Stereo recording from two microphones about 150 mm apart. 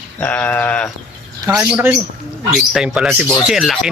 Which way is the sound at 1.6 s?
10° right (ahead or behind).